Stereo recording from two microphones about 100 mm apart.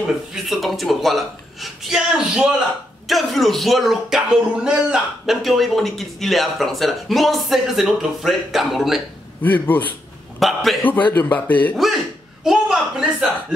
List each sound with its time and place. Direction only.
0.0 s speech: 5° right (ahead or behind)
9.4 s a man's voice: 15° left (ahead or behind)
10.4 s speech: centre (ahead or behind)
10.8 s a man's voice: 15° left (ahead or behind)
11.7 s a man's voice: centre (ahead or behind)